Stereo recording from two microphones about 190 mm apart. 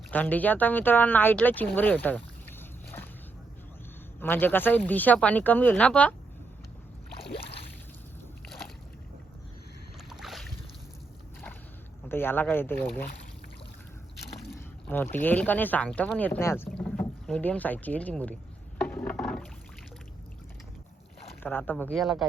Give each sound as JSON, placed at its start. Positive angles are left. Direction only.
{"t": 0.1, "sound": "speech", "side_deg": 10}
{"t": 4.2, "sound": "speech", "side_deg": 10}
{"t": 10.1, "sound": "boat", "side_deg": 0}
{"t": 12.0, "sound": "speech", "side_deg": 10}
{"t": 14.8, "sound": "speech", "side_deg": 10}
{"t": 21.4, "sound": "speech", "side_deg": 10}